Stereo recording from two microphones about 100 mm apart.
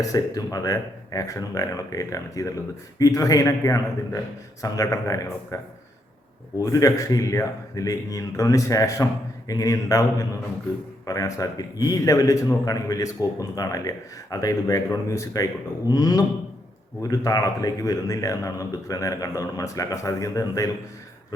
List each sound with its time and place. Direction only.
0.0 s a man's voice: 35° left (ahead or behind)
6.6 s a man's voice: 35° left (ahead or behind)